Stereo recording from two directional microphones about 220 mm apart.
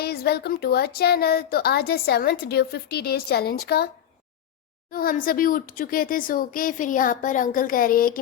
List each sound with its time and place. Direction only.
0.0 s speech: 45° left (ahead or behind)
4.9 s speech: 40° left (ahead or behind)